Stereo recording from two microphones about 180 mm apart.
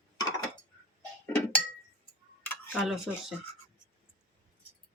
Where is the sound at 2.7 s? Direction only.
Centre (ahead or behind).